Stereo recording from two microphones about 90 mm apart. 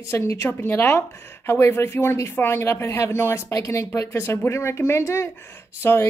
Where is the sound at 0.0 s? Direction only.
35° left (ahead or behind).